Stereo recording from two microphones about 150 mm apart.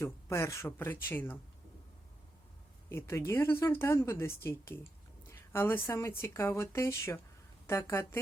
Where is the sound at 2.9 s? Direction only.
15° left (ahead or behind).